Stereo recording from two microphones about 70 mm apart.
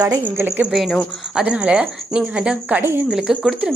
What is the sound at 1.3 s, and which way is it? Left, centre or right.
Speech, centre.